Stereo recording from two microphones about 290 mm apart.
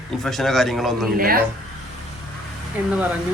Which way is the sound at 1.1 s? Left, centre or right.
Right.